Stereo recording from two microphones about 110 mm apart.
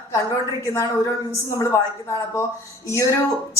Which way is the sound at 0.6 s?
30° left (ahead or behind).